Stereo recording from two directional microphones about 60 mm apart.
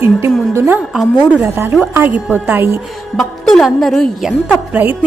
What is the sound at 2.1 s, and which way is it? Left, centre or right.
Speech, right.